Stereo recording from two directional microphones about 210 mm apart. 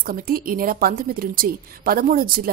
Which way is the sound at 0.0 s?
45° right (ahead or behind).